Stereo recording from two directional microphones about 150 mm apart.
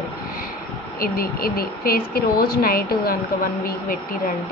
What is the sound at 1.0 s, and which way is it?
A woman's voice, 85° left.